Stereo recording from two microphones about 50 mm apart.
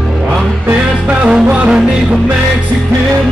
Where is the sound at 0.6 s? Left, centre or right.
Right.